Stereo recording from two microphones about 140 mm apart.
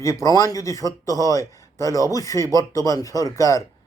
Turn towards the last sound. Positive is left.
turn(degrees=25)  # may be behind; listen again after turning